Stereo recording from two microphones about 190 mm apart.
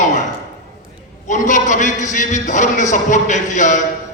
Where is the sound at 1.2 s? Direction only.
40° left (ahead or behind).